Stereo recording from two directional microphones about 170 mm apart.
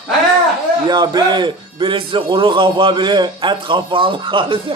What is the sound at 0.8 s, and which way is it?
Speech, 25° right (ahead or behind).